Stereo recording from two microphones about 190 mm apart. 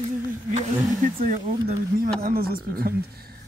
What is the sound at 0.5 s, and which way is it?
Speech, 40° right (ahead or behind).